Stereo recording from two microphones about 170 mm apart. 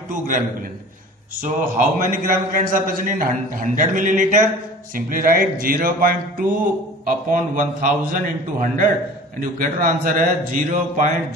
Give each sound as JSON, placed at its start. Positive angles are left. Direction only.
{"t": 1.3, "sound": "a man's voice", "side_deg": -50}